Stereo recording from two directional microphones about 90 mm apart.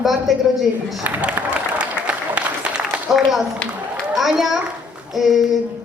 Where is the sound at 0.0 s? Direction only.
Centre (ahead or behind).